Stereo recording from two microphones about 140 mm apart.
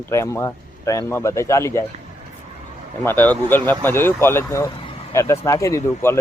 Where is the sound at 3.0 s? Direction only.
15° left (ahead or behind).